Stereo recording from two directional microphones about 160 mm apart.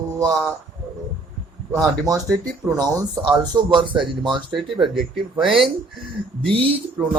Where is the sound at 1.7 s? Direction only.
20° right (ahead or behind).